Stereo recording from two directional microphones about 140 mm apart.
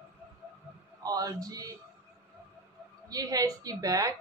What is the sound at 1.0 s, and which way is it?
Speech, 25° right (ahead or behind).